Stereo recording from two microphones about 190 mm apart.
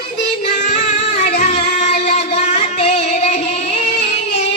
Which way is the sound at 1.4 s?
35° left (ahead or behind).